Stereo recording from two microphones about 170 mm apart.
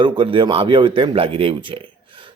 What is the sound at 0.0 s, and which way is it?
A man's voice, 30° right (ahead or behind).